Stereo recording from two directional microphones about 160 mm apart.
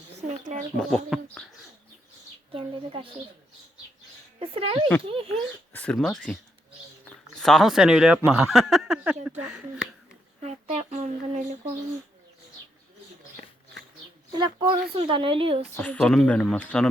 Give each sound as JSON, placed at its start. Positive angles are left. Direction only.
{"t": 0.2, "sound": "a sound", "side_deg": -50}
{"t": 0.8, "sound": "a child's voice", "side_deg": 5}
{"t": 2.5, "sound": "speech", "side_deg": -35}
{"t": 4.4, "sound": "speech", "side_deg": -35}
{"t": 5.3, "sound": "a child's voice", "side_deg": 5}
{"t": 10.4, "sound": "speech", "side_deg": -40}
{"t": 14.3, "sound": "speech", "side_deg": -25}
{"t": 15.7, "sound": "speech", "side_deg": 10}